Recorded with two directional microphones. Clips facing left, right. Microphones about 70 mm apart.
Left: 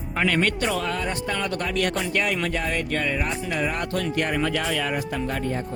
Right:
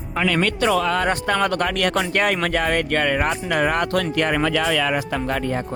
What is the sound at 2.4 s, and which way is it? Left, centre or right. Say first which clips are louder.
Speech: right 5 dB; right.